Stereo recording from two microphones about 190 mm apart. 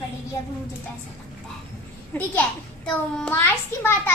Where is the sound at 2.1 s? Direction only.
10° left (ahead or behind).